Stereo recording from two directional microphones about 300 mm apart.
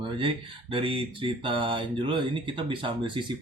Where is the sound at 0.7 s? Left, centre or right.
Centre.